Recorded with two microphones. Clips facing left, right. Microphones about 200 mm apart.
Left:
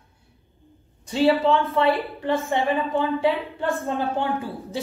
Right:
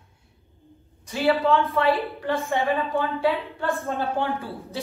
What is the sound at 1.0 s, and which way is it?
Speech, 30° left (ahead or behind).